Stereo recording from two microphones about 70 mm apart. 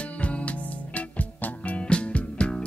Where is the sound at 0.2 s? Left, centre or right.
Centre.